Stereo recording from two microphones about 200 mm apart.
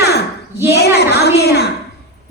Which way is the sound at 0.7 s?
55° left (ahead or behind).